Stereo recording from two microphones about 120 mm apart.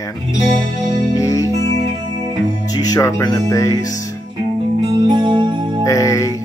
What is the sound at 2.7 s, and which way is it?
Speech, 30° left (ahead or behind).